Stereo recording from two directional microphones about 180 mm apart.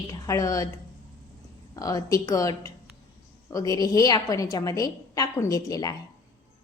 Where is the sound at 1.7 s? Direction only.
20° left (ahead or behind).